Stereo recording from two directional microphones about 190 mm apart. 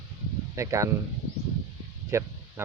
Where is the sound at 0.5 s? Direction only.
15° right (ahead or behind).